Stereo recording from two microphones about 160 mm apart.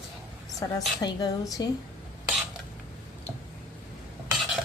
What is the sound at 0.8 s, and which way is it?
Speech, 25° left (ahead or behind).